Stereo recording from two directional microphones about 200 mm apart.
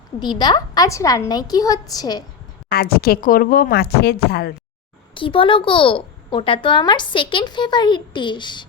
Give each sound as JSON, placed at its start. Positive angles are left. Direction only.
{"t": 0.2, "sound": "speech", "side_deg": 20}
{"t": 2.6, "sound": "speech", "side_deg": 50}
{"t": 5.1, "sound": "speech", "side_deg": 25}